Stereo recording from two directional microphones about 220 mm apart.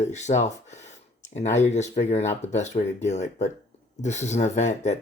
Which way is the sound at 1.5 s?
30° left (ahead or behind).